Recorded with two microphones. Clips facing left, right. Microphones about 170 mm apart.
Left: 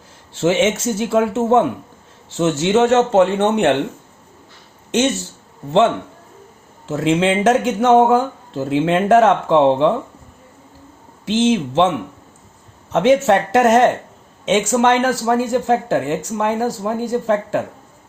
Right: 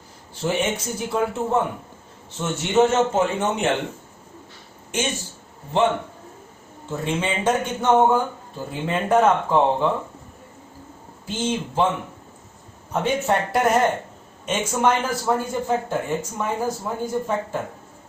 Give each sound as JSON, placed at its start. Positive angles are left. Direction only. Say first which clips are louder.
{"t": 0.3, "sound": "a man's voice", "louder": "left 8 dB", "side_deg": 90}
{"t": 6.8, "sound": "a man's voice", "louder": "left 9 dB", "side_deg": 90}
{"t": 11.3, "sound": "speech", "louder": "left 9 dB", "side_deg": 90}
{"t": 12.9, "sound": "speech", "louder": "left 8 dB", "side_deg": 85}